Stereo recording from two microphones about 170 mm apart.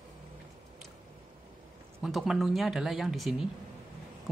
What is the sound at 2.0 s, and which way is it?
Speech, centre (ahead or behind).